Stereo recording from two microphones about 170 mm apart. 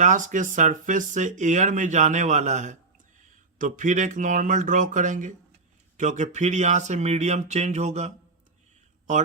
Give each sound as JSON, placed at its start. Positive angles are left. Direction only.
{"t": 0.0, "sound": "speech", "side_deg": -50}